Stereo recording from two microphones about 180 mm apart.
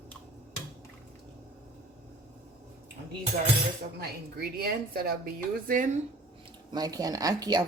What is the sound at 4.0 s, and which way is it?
A woman's voice, 60° right (ahead or behind).